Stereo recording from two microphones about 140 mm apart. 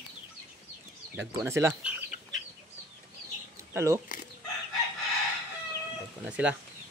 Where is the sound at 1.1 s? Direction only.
20° right (ahead or behind).